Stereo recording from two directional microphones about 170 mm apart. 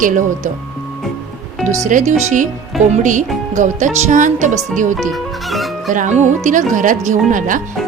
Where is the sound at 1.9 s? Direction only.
50° right (ahead or behind).